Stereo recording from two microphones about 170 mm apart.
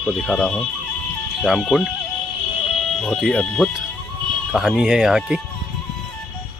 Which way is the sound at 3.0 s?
Centre (ahead or behind).